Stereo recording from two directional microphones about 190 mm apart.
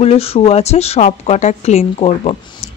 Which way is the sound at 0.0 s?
30° left (ahead or behind).